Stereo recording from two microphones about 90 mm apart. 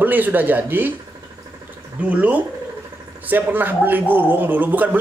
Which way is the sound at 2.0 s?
15° right (ahead or behind).